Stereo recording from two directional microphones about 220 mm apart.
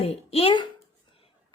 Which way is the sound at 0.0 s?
25° left (ahead or behind).